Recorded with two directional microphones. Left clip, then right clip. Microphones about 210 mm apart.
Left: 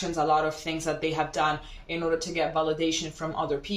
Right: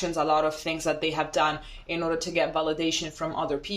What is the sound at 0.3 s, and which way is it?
Speech, 50° right (ahead or behind).